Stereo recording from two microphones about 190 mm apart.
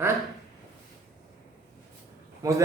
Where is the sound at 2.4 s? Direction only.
20° right (ahead or behind).